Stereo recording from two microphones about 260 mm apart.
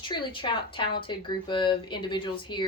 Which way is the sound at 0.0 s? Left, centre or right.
Centre.